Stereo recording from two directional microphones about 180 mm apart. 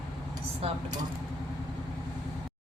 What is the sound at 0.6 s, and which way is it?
Speech, 30° right (ahead or behind).